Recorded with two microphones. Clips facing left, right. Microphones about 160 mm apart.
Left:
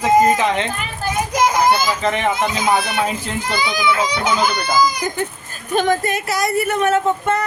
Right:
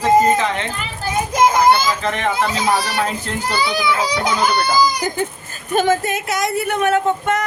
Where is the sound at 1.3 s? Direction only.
25° right (ahead or behind).